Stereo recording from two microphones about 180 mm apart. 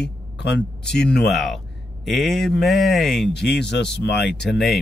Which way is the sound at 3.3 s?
70° left (ahead or behind).